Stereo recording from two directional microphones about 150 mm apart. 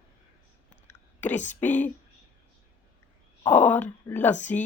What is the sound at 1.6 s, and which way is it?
Speech, 10° left (ahead or behind).